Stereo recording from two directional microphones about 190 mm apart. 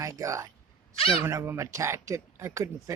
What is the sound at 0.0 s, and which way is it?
Speech, 15° right (ahead or behind).